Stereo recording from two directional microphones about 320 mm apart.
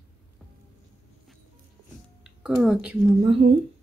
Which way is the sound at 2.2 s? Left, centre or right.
Centre.